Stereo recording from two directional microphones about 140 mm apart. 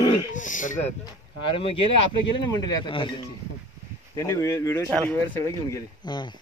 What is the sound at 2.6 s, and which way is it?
Speech, 30° left (ahead or behind).